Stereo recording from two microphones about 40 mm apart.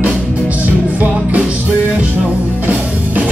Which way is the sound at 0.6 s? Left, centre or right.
Right.